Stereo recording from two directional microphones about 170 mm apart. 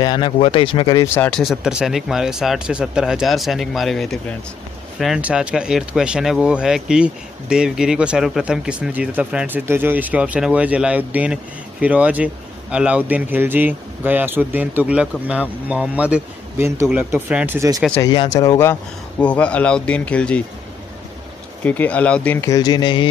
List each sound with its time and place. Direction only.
0.0 s speech: 25° left (ahead or behind)
1.1 s speech: 10° left (ahead or behind)
1.4 s speech: centre (ahead or behind)
17.9 s speech: 25° left (ahead or behind); by 20.4 s 5° left (ahead or behind)
21.6 s speech: 10° left (ahead or behind); by 23.0 s 25° left (ahead or behind)